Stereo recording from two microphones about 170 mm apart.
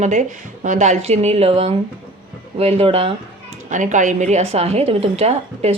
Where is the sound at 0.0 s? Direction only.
45° right (ahead or behind).